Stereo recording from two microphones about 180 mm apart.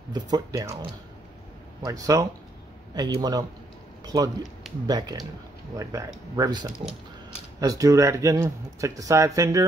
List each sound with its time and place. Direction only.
0.1 s speech: 20° right (ahead or behind)